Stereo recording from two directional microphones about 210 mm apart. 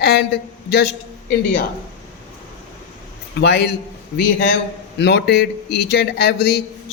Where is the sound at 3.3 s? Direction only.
50° left (ahead or behind).